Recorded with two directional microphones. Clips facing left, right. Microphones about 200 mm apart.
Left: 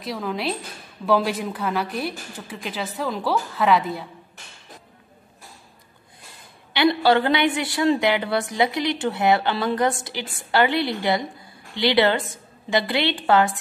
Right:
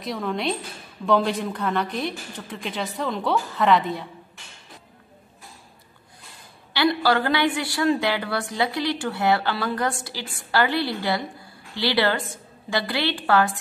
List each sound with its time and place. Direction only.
0.0 s a woman's voice: centre (ahead or behind)
6.7 s a woman's voice: 20° left (ahead or behind)